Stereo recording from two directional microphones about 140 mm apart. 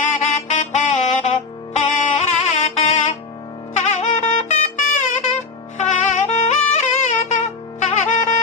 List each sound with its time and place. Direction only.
0.0 s music: 60° left (ahead or behind)